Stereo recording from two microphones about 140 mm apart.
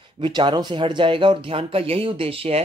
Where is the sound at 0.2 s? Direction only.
35° right (ahead or behind).